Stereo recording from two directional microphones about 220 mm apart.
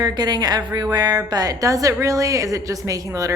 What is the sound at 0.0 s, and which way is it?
A woman's voice, 20° right (ahead or behind).